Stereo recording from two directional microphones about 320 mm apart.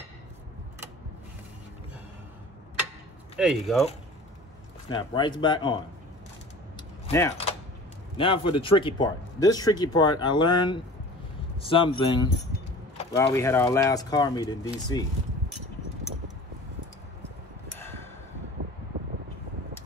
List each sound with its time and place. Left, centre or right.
3.3 s speech: centre
4.8 s speech: centre
7.1 s speech: centre